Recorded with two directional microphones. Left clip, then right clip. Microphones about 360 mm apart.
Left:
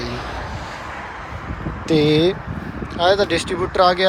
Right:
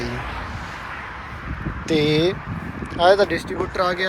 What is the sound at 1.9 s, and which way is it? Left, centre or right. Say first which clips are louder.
Speech: left 3 dB; centre.